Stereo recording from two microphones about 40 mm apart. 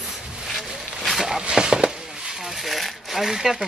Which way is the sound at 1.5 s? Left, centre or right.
Centre.